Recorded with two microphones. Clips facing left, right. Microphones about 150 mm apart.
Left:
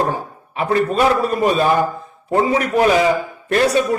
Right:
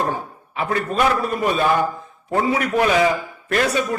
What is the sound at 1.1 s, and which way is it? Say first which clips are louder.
A man's voice: left 4 dB; 35° left (ahead or behind).